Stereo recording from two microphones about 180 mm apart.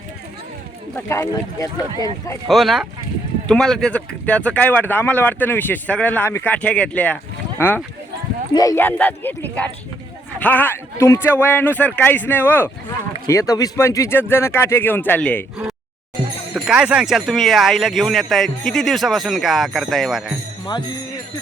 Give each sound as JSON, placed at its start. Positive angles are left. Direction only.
{"t": 0.9, "sound": "speech", "side_deg": 15}
{"t": 2.5, "sound": "speech", "side_deg": 0}
{"t": 8.5, "sound": "speech", "side_deg": 15}
{"t": 16.6, "sound": "speech", "side_deg": -5}